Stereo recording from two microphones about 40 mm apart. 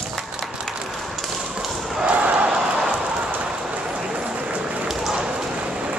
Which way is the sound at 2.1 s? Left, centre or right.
Right.